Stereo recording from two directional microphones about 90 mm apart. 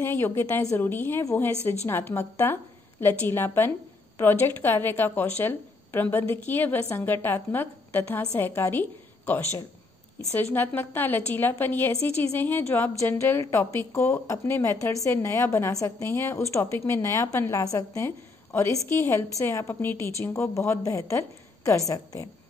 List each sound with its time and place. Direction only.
0.0 s a woman's voice: 25° left (ahead or behind)
10.3 s a woman's voice: 20° left (ahead or behind); by 22.3 s 40° left (ahead or behind)